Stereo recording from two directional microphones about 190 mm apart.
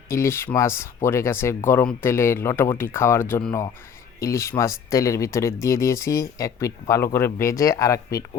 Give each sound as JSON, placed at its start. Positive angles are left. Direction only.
{"t": 0.1, "sound": "speech", "side_deg": 15}